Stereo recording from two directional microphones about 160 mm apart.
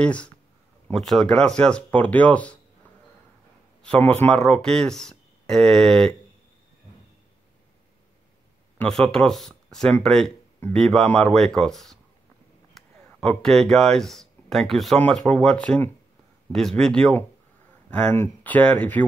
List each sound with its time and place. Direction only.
0.0 s speech: 5° left (ahead or behind)
3.8 s speech: 10° left (ahead or behind)
8.7 s speech: 5° left (ahead or behind)